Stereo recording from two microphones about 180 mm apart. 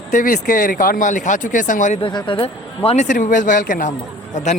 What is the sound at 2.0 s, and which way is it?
Speech, 25° left (ahead or behind).